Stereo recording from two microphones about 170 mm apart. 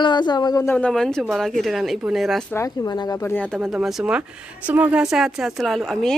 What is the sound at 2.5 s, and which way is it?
Speech, 20° left (ahead or behind).